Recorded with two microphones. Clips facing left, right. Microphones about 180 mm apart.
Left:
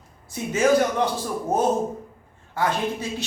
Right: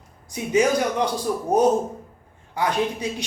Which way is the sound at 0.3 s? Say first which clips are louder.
Even; 15° right (ahead or behind).